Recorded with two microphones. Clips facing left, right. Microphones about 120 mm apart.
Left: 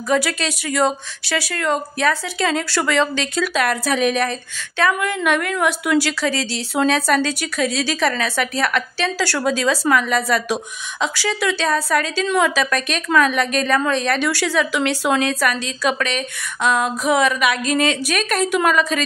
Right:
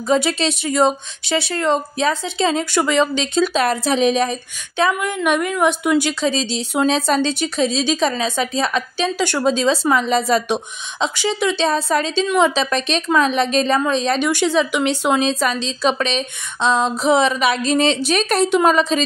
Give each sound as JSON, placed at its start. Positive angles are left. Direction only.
{"t": 0.1, "sound": "speech", "side_deg": -25}